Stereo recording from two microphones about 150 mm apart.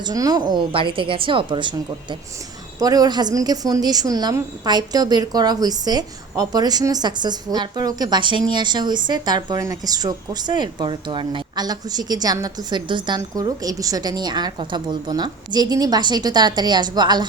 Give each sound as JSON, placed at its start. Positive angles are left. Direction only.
{"t": 0.0, "sound": "a woman's voice", "side_deg": -25}